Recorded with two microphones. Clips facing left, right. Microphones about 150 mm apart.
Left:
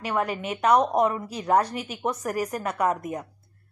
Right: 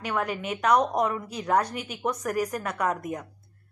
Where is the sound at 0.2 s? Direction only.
5° left (ahead or behind).